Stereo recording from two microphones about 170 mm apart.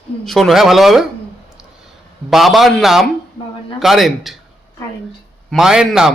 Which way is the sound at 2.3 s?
Centre (ahead or behind).